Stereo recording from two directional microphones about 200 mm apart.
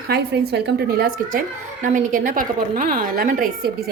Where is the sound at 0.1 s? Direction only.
55° right (ahead or behind).